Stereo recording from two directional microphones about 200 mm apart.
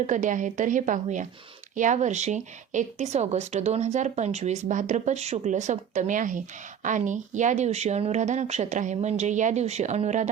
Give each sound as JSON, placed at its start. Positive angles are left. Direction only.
{"t": 0.1, "sound": "speech", "side_deg": -40}